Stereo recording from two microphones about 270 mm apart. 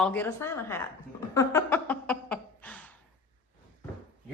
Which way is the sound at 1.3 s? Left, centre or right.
Centre.